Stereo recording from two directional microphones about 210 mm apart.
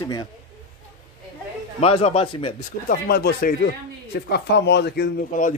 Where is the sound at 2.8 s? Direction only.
45° left (ahead or behind).